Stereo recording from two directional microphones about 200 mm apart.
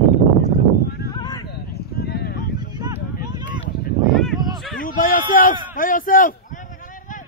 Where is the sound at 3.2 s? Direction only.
20° right (ahead or behind).